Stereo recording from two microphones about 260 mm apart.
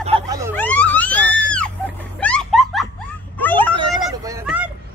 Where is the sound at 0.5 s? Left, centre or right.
Centre.